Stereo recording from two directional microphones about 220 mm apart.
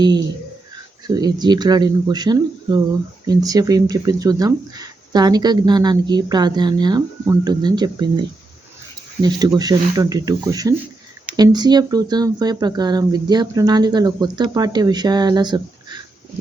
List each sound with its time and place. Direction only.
1.0 s speech: 20° right (ahead or behind)
9.6 s speech: 15° right (ahead or behind)